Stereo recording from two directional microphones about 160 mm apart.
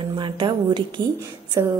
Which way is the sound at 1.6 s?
20° right (ahead or behind).